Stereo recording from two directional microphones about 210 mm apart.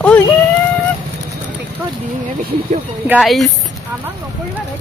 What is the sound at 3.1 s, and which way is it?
Speech, centre (ahead or behind).